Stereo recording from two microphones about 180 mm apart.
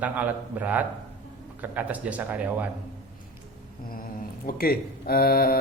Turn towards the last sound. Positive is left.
turn(degrees=55)  # may be behind; listen again after turning